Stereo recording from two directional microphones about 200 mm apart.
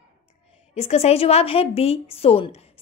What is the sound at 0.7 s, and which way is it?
A woman's voice, 30° left (ahead or behind).